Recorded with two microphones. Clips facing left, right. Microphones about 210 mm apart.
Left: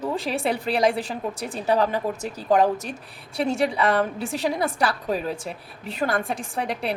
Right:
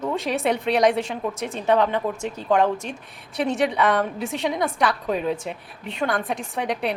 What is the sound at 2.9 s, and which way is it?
A woman's voice, centre (ahead or behind).